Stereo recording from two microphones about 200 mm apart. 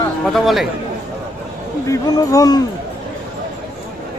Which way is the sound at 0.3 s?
Centre (ahead or behind).